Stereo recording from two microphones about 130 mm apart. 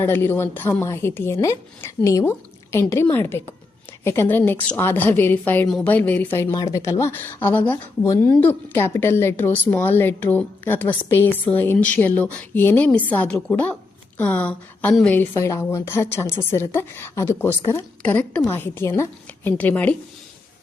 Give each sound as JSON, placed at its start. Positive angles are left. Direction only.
{"t": 0.0, "sound": "a woman's voice", "side_deg": 15}
{"t": 5.6, "sound": "a woman's voice", "side_deg": 5}
{"t": 6.4, "sound": "a woman's voice", "side_deg": 25}